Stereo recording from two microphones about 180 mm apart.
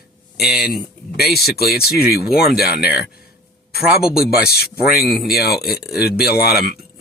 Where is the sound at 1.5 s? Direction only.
60° left (ahead or behind).